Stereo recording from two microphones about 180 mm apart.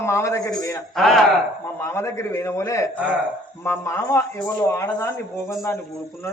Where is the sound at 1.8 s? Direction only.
15° left (ahead or behind).